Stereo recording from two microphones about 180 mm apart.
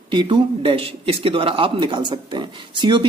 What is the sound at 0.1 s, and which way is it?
A man's voice, 25° right (ahead or behind).